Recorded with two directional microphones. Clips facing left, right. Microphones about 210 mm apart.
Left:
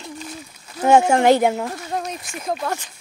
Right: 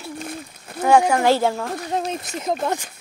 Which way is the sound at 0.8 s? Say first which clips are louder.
Left 2 dB; 25° left (ahead or behind).